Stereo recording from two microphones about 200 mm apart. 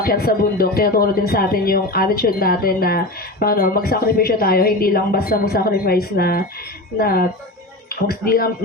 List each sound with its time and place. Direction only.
0.0 s speech: 50° left (ahead or behind)